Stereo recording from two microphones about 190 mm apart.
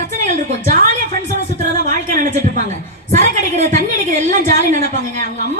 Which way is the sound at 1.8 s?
50° right (ahead or behind).